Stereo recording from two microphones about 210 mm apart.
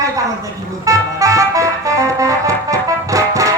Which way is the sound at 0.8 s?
15° right (ahead or behind).